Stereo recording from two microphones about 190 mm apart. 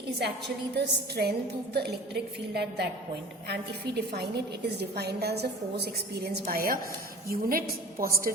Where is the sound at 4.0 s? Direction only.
55° right (ahead or behind).